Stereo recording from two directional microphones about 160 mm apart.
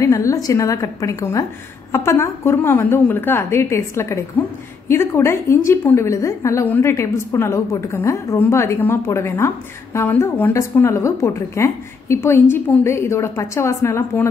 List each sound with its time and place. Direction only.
0.0 s a woman's voice: 20° left (ahead or behind)